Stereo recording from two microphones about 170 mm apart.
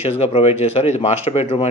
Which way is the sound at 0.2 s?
35° left (ahead or behind).